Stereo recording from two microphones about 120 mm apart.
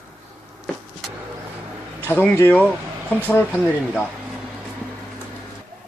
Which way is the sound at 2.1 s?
15° left (ahead or behind).